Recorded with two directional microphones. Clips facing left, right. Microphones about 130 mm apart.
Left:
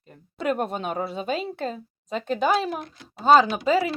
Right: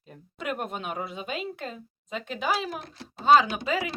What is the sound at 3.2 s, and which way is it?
Speech, 35° left (ahead or behind).